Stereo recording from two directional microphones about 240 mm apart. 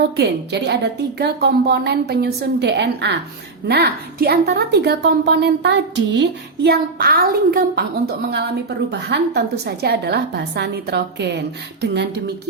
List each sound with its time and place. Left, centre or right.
0.0 s a woman's voice: right